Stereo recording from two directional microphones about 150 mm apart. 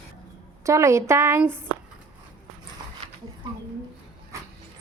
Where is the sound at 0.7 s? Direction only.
20° right (ahead or behind).